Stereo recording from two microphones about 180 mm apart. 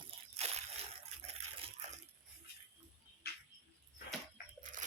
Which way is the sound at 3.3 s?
60° left (ahead or behind).